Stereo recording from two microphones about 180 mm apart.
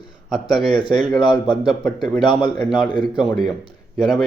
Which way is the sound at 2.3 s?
25° left (ahead or behind).